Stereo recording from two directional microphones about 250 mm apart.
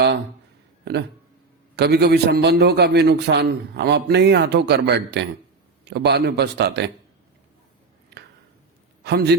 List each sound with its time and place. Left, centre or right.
1.7 s a man's voice: right
9.0 s a man's voice: right